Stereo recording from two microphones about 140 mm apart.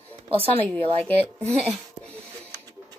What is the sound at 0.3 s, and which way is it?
Speech, 40° right (ahead or behind).